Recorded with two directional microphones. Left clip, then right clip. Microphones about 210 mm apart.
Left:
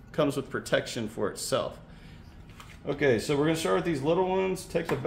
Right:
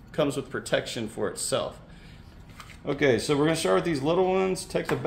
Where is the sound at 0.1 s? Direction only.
5° left (ahead or behind).